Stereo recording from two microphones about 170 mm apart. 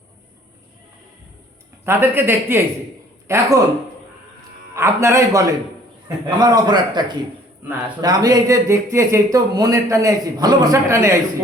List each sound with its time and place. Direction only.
1.8 s speech: 15° right (ahead or behind)
4.7 s speech: 15° right (ahead or behind)